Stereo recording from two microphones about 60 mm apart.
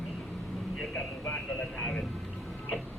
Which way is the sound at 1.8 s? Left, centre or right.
Centre.